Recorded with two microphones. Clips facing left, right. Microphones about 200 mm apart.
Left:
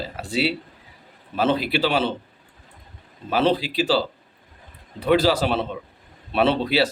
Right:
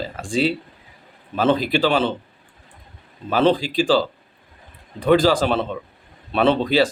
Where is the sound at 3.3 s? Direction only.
10° left (ahead or behind).